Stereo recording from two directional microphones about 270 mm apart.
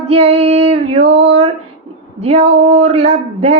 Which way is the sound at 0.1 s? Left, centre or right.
Right.